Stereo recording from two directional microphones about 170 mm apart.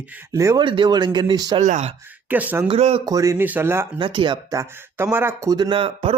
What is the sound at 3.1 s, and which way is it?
Speech, 20° right (ahead or behind).